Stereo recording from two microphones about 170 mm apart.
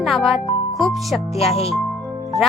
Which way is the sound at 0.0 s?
Centre (ahead or behind).